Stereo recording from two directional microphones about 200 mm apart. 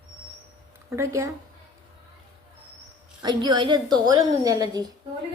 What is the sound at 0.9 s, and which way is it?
Speech, 15° right (ahead or behind).